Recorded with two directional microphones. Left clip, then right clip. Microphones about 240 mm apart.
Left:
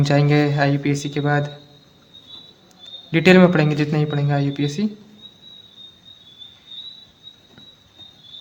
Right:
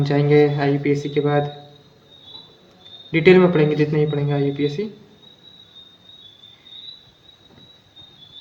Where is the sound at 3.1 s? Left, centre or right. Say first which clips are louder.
Even; left.